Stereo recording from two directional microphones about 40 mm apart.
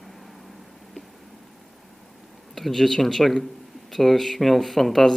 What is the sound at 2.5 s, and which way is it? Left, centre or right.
Speech, centre.